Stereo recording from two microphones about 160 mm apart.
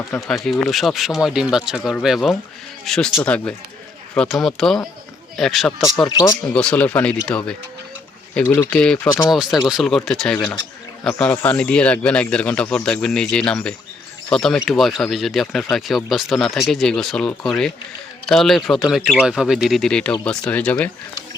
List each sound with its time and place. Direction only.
0.2 s a man's voice: centre (ahead or behind)
6.1 s speech: 20° left (ahead or behind)
6.5 s a man's voice: 5° left (ahead or behind)